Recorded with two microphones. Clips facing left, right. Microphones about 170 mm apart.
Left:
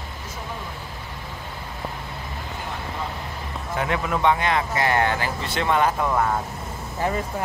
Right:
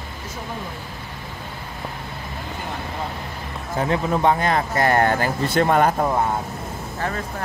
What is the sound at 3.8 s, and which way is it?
Speech, 30° right (ahead or behind).